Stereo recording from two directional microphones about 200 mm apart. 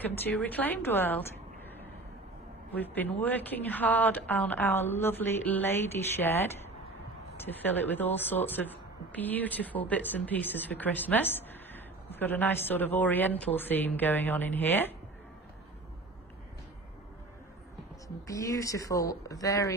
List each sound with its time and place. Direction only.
0.0 s speech: 10° left (ahead or behind)
2.7 s speech: 10° left (ahead or behind)
18.0 s speech: 15° left (ahead or behind)